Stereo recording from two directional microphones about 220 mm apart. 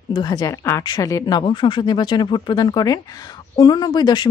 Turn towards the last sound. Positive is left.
turn(degrees=20)  # may be behind; listen again after turning